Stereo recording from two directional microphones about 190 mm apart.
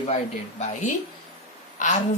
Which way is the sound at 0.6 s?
40° left (ahead or behind).